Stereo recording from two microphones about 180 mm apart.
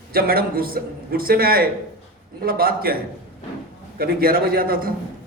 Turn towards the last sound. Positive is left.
turn(degrees=-55)  # may be behind; listen again after turning